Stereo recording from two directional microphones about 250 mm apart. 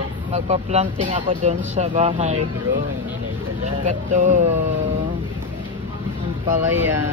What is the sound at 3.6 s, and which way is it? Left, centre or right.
Speech, right.